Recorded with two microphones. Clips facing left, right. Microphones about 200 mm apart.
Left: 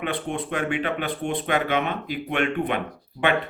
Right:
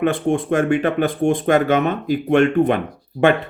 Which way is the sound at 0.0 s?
45° right (ahead or behind).